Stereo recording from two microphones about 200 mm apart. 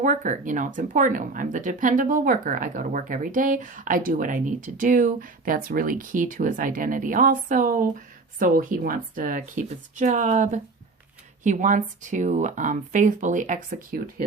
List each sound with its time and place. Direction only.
0.0 s speech: 40° right (ahead or behind)